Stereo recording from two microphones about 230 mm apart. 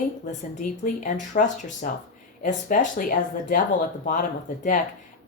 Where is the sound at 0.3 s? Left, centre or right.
Left.